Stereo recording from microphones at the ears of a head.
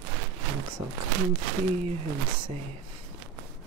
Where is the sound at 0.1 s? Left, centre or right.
Right.